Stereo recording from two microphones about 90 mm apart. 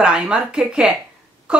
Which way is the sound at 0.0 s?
10° right (ahead or behind).